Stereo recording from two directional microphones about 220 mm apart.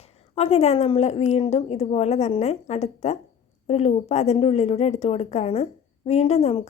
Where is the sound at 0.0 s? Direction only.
30° left (ahead or behind).